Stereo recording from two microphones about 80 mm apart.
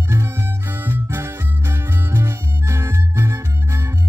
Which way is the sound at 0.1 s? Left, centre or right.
Right.